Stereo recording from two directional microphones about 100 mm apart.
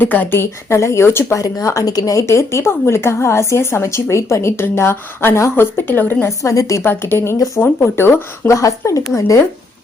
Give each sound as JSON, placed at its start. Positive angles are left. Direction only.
{"t": 0.0, "sound": "speech", "side_deg": 20}
{"t": 6.4, "sound": "speech", "side_deg": 35}
{"t": 7.3, "sound": "speech", "side_deg": 35}
{"t": 7.6, "sound": "speech", "side_deg": 20}